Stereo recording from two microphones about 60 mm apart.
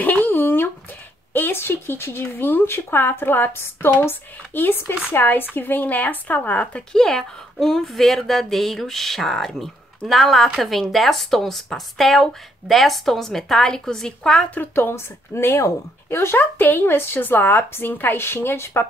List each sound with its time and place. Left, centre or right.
0.0 s a sound: left
1.3 s speech: left
6.9 s speech: centre
14.8 s speech: left
16.3 s speech: left